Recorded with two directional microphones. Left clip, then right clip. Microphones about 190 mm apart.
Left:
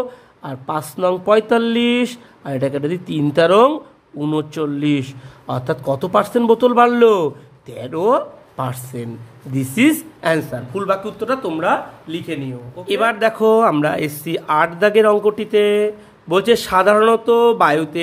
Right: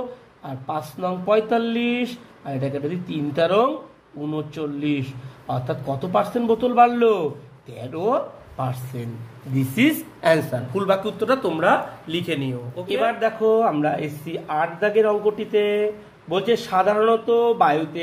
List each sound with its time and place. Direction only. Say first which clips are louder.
0.4 s speech: left 5 dB; 40° left (ahead or behind); by 12.5 s centre (ahead or behind)
12.8 s speech: left 5 dB; 45° left (ahead or behind)